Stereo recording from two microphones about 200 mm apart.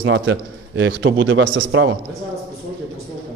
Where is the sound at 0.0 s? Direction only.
70° right (ahead or behind).